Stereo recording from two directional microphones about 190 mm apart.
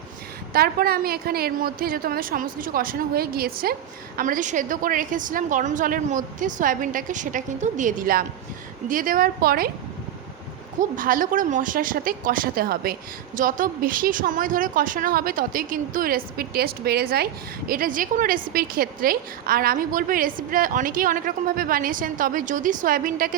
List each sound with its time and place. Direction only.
0.5 s a woman's voice: 50° right (ahead or behind)
10.8 s a woman's voice: 45° right (ahead or behind)